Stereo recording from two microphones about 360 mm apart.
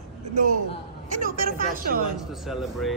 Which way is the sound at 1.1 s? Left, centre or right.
Right.